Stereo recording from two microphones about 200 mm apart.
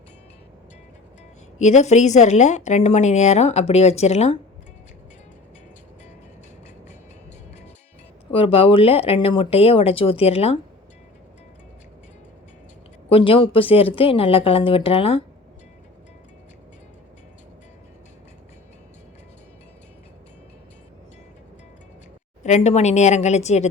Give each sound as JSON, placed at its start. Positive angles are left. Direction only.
{"t": 1.5, "sound": "a woman's voice", "side_deg": 35}
{"t": 8.3, "sound": "speech", "side_deg": 30}
{"t": 13.1, "sound": "speech", "side_deg": 25}
{"t": 22.4, "sound": "a woman's voice", "side_deg": 35}